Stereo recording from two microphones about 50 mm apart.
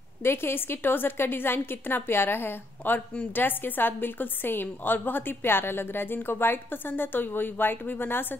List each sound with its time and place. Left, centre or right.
0.2 s a woman's voice: left